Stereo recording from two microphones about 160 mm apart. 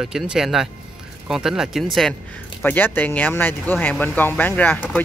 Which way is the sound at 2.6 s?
10° left (ahead or behind).